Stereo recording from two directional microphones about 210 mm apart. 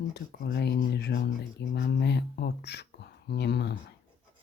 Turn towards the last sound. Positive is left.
turn(degrees=55)  # may be behind; listen again after turning